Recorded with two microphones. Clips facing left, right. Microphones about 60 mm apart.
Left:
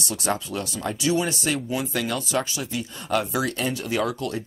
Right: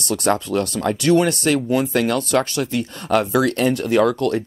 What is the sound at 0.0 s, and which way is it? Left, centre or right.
Speech, right.